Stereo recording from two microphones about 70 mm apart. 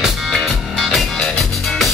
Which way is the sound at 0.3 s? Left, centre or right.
Centre.